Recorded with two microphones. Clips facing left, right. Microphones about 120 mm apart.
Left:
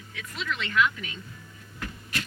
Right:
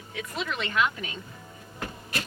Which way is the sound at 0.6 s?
25° right (ahead or behind).